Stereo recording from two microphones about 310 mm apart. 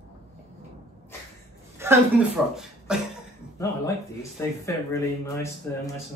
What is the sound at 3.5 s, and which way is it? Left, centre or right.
Speech, centre.